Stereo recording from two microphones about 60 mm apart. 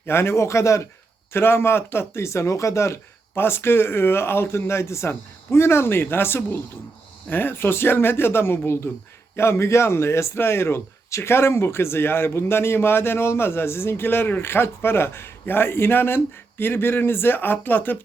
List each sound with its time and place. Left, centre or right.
0.0 s speech: left
1.3 s speech: left